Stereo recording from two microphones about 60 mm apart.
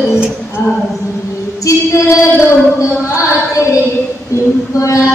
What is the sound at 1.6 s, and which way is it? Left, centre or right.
Music, left.